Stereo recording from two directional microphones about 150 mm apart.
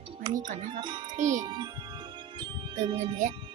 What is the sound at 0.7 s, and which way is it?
Speech, 30° right (ahead or behind).